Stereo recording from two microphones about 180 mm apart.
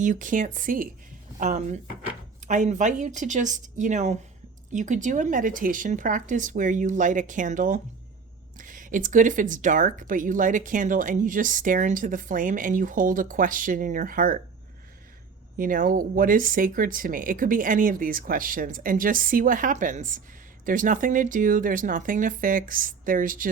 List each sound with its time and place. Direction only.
0.0 s speech: 45° right (ahead or behind)
15.5 s speech: 50° right (ahead or behind)